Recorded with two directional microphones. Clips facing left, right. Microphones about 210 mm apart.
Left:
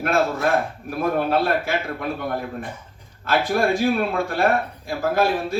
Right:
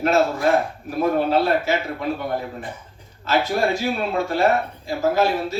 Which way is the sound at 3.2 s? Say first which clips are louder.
Even; 55° left (ahead or behind).